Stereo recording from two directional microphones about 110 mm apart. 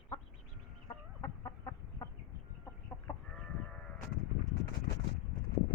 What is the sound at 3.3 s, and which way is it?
Sheep, 5° left (ahead or behind).